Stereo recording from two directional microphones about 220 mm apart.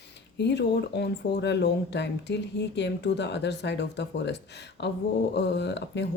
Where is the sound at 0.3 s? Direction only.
50° left (ahead or behind).